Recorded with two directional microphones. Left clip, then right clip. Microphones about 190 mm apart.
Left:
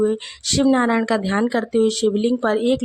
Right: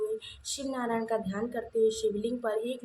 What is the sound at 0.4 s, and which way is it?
Speech, 55° left (ahead or behind).